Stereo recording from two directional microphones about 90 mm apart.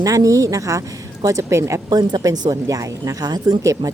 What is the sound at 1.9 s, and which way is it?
A woman's voice, 45° right (ahead or behind).